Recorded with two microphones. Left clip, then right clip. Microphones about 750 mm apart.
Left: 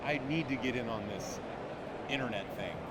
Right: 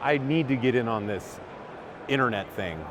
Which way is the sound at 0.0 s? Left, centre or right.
Right.